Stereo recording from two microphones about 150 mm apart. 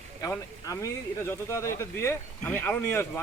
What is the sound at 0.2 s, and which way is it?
Speech, 20° left (ahead or behind).